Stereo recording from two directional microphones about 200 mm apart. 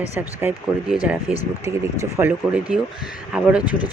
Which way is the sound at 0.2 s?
10° right (ahead or behind).